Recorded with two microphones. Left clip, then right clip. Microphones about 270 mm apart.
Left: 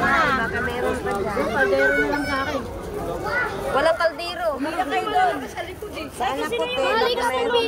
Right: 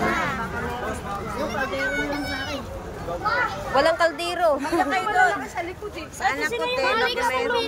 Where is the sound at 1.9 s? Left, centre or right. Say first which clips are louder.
Left 5 dB; centre.